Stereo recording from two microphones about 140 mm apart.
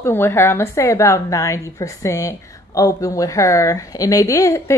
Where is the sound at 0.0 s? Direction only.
15° left (ahead or behind).